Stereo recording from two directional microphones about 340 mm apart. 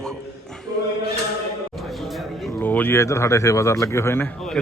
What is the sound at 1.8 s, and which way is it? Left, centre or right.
A man's voice, centre.